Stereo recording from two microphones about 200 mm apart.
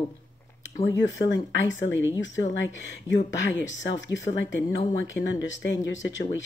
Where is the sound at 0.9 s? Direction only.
65° left (ahead or behind).